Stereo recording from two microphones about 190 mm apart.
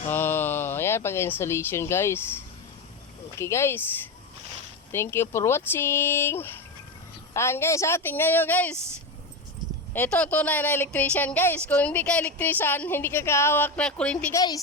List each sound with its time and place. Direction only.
0.1 s speech: 10° left (ahead or behind)
3.3 s a woman's voice: 15° left (ahead or behind)
4.9 s a woman's voice: 10° left (ahead or behind)
9.9 s a woman's voice: 10° left (ahead or behind)
14.3 s a woman's voice: 20° left (ahead or behind)